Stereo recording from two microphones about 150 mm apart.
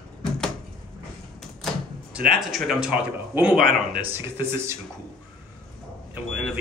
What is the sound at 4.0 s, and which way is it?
Speech, 15° right (ahead or behind).